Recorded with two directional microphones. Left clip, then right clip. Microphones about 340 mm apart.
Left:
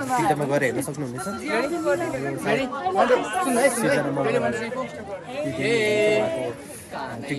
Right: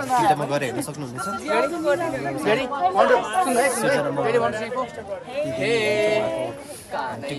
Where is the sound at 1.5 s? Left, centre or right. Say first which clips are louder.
Right 2 dB; right.